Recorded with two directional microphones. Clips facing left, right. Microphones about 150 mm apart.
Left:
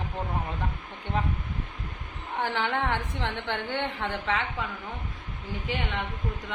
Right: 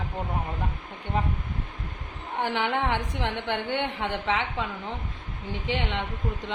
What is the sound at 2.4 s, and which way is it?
A woman's voice, 15° right (ahead or behind).